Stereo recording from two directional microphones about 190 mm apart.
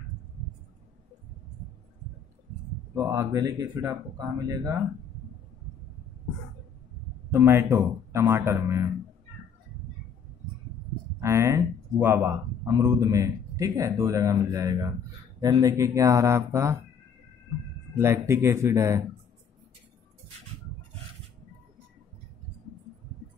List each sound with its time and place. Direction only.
2.9 s speech: 15° right (ahead or behind)
7.4 s speech: 15° right (ahead or behind)
11.1 s speech: 15° right (ahead or behind)
17.9 s speech: 15° right (ahead or behind)